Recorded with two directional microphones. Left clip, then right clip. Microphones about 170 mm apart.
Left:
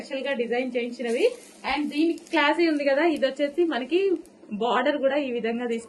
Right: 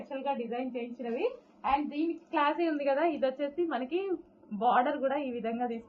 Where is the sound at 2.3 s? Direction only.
40° left (ahead or behind).